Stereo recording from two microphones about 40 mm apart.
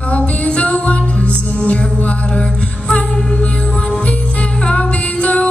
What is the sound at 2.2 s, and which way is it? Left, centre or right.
Mantra, left.